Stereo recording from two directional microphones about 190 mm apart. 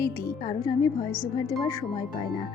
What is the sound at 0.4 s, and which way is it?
Speech, 25° left (ahead or behind).